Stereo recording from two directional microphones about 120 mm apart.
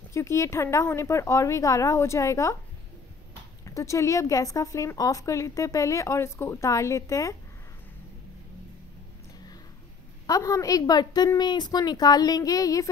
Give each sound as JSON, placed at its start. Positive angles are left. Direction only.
{"t": 0.1, "sound": "a woman's voice", "side_deg": 25}
{"t": 3.6, "sound": "a woman's voice", "side_deg": 25}
{"t": 10.2, "sound": "a woman's voice", "side_deg": 25}